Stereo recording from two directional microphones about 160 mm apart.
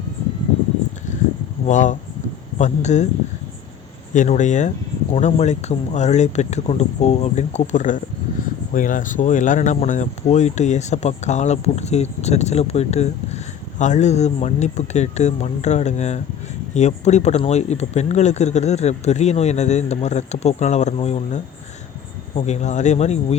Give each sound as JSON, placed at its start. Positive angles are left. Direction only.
{"t": 1.6, "sound": "speech", "side_deg": 50}
{"t": 4.1, "sound": "speech", "side_deg": 50}